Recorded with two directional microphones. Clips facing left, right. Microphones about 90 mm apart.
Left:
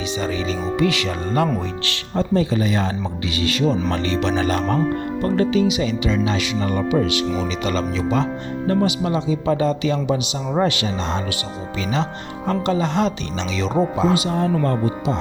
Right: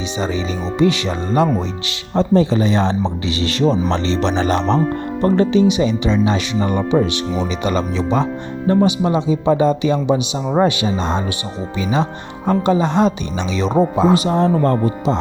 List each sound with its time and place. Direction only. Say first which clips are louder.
0.2 s speech: right 3 dB; 20° right (ahead or behind)
14.1 s speech: right 5 dB; 35° right (ahead or behind)